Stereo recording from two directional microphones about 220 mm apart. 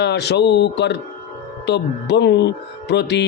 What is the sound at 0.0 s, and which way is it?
Speech, 50° left (ahead or behind).